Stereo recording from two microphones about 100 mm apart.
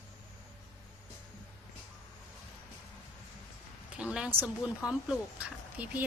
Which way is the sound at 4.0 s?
10° right (ahead or behind).